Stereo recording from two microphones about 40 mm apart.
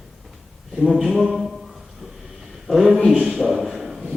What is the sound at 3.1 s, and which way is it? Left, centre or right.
Speech, centre.